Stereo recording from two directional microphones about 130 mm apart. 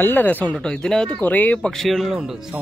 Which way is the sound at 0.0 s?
15° left (ahead or behind).